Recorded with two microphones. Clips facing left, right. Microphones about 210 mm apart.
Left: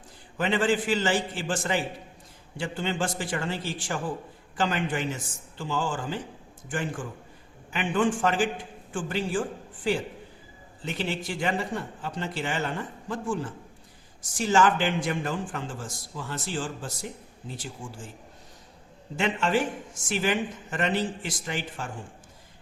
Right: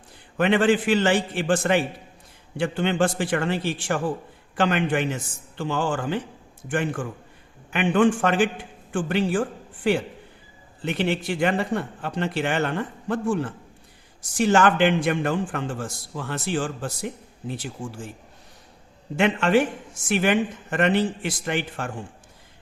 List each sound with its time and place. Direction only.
0.3 s speech: 60° right (ahead or behind)
19.1 s speech: 60° right (ahead or behind)